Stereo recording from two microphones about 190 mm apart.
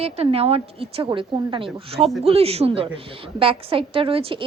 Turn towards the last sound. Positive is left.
turn(degrees=-30)  # may be behind; listen again after turning